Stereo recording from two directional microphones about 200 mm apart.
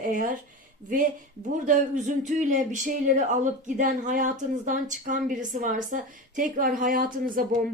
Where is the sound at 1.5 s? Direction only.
40° right (ahead or behind).